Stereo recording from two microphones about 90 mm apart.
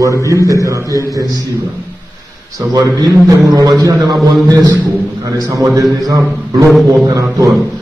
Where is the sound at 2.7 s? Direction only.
45° right (ahead or behind).